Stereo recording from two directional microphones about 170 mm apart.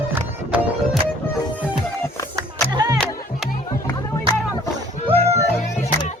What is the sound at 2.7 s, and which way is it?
Music, 25° right (ahead or behind).